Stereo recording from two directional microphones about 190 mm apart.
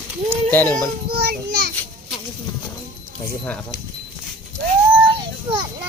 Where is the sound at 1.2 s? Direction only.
55° right (ahead or behind).